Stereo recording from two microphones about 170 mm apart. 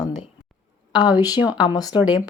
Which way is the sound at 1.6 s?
20° left (ahead or behind).